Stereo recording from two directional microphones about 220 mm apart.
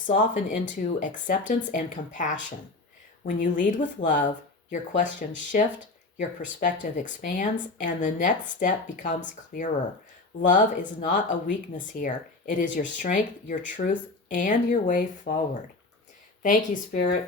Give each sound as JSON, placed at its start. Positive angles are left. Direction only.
{"t": 0.0, "sound": "speech", "side_deg": 35}
{"t": 16.4, "sound": "speech", "side_deg": 35}